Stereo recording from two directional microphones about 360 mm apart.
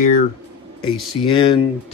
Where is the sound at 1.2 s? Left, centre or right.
Centre.